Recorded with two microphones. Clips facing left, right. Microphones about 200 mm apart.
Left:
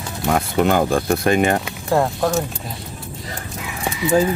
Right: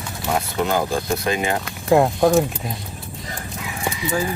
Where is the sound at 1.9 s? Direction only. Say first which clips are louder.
Right 4 dB; 10° right (ahead or behind).